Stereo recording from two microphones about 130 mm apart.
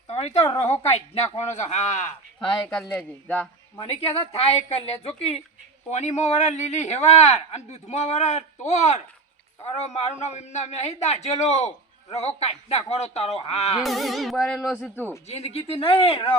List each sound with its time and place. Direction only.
0.1 s speech: 55° left (ahead or behind)
2.5 s music: 5° left (ahead or behind)
3.8 s a man's voice: 50° left (ahead or behind)
5.9 s a man's voice: 60° left (ahead or behind)
13.8 s music: centre (ahead or behind)
15.3 s a man's voice: 55° left (ahead or behind)